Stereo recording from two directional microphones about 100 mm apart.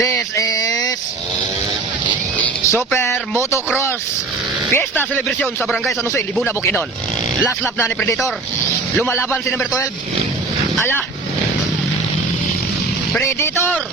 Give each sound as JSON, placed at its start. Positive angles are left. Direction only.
{"t": 0.0, "sound": "a sound", "side_deg": 30}
{"t": 2.4, "sound": "speech", "side_deg": 25}
{"t": 4.7, "sound": "speech", "side_deg": 20}
{"t": 7.8, "sound": "a man's voice", "side_deg": 20}
{"t": 13.4, "sound": "a man's voice", "side_deg": 20}